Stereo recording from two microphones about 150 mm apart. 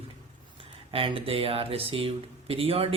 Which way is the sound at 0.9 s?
35° right (ahead or behind).